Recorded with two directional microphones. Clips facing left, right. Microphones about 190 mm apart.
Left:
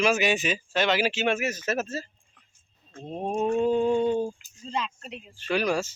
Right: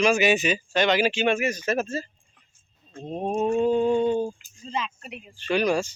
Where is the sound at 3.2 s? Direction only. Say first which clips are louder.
Right 2 dB; centre (ahead or behind).